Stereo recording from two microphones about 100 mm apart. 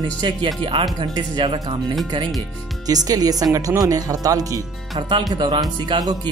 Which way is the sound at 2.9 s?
40° right (ahead or behind).